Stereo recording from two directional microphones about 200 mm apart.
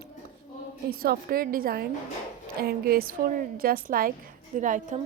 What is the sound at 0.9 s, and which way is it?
A woman's voice, 50° right (ahead or behind).